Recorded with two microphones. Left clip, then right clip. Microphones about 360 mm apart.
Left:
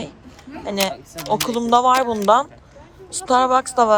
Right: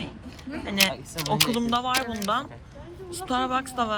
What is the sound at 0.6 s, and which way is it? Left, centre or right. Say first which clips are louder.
Speech: left 2 dB; centre.